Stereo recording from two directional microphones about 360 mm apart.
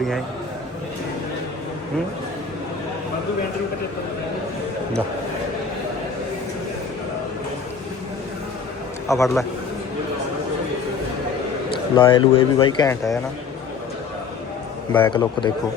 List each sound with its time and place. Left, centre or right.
9.0 s speech: centre
11.9 s speech: centre
14.9 s speech: centre